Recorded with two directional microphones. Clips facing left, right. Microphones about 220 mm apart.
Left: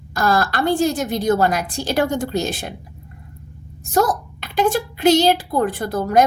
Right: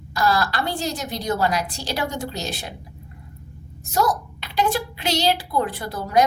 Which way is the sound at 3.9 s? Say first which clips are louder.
Left 4 dB; 50° left (ahead or behind).